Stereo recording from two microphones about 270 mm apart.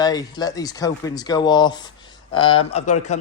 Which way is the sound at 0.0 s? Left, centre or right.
Centre.